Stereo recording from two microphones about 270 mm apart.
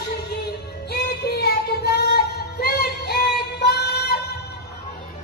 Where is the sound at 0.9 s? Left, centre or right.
Left.